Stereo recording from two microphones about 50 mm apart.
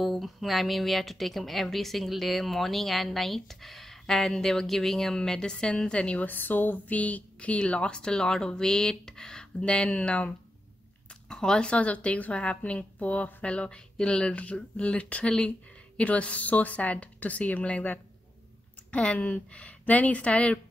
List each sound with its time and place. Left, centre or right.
0.0 s a woman's voice: centre
6.1 s speech: left
11.2 s speech: centre